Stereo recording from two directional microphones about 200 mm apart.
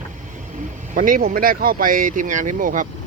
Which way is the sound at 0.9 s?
45° right (ahead or behind).